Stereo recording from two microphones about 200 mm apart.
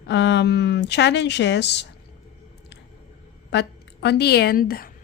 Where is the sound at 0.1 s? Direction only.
60° left (ahead or behind).